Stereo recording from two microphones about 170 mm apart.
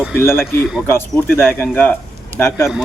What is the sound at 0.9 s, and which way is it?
Speech, 10° left (ahead or behind).